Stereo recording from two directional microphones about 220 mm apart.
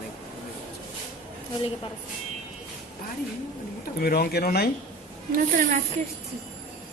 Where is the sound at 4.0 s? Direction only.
45° left (ahead or behind).